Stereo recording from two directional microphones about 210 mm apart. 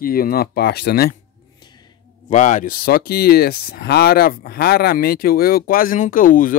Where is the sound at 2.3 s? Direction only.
35° left (ahead or behind).